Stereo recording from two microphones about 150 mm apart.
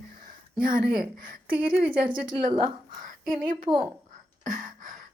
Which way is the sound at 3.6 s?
35° right (ahead or behind).